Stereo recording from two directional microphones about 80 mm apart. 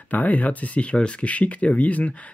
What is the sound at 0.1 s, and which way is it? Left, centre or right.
Speech, centre.